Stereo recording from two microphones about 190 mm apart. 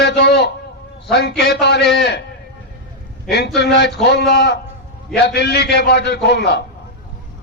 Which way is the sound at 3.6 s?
60° left (ahead or behind).